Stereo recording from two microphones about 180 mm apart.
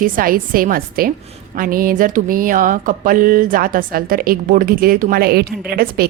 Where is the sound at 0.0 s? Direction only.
50° right (ahead or behind).